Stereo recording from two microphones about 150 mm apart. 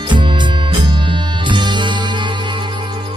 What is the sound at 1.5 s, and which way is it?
Music, 30° right (ahead or behind).